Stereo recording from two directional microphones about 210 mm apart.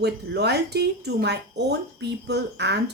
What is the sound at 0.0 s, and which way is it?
A woman's voice, 50° right (ahead or behind).